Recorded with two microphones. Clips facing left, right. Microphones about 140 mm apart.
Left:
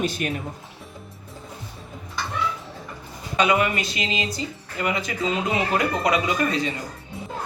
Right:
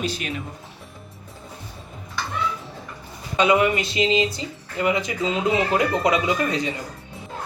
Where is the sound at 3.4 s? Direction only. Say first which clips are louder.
Right 2 dB; 25° right (ahead or behind).